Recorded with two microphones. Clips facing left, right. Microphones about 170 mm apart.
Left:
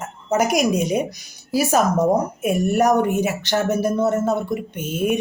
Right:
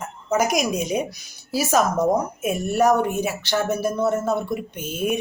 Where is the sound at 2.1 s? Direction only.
10° left (ahead or behind).